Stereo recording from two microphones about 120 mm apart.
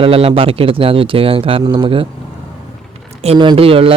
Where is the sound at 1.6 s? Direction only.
35° right (ahead or behind).